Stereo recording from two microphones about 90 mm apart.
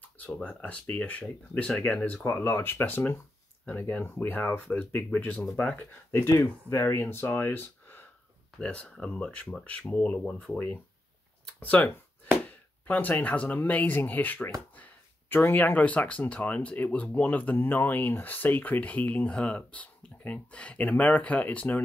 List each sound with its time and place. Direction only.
0.2 s speech: 15° left (ahead or behind)
2.2 s speech: 25° left (ahead or behind)
6.4 s speech: 30° left (ahead or behind)
8.5 s speech: 10° left (ahead or behind)